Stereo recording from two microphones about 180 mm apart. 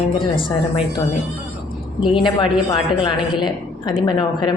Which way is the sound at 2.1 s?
25° left (ahead or behind).